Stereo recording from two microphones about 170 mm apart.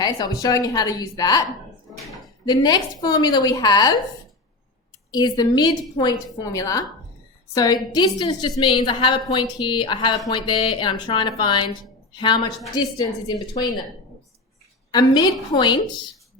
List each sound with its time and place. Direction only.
0.0 s a woman's voice: 25° left (ahead or behind)
2.5 s a woman's voice: 25° left (ahead or behind)
5.1 s a woman's voice: 25° left (ahead or behind)
14.9 s a woman's voice: 25° left (ahead or behind)